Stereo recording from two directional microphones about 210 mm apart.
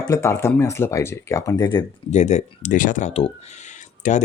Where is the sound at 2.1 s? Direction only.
35° left (ahead or behind).